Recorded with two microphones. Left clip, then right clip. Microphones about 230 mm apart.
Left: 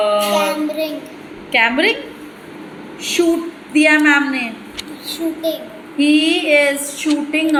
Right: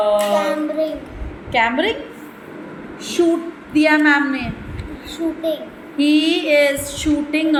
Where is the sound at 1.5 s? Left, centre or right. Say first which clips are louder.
Left 3 dB; left.